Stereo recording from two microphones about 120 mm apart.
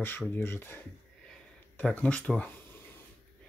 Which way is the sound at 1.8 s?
10° left (ahead or behind).